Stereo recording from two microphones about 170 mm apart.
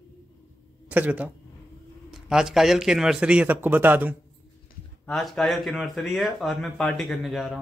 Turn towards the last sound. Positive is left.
turn(degrees=0)  # may be behind; listen again after turning